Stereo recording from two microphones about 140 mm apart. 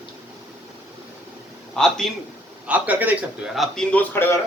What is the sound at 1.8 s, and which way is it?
Speech, 5° left (ahead or behind).